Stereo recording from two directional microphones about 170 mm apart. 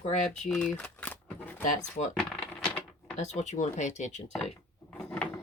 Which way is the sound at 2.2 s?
5° left (ahead or behind).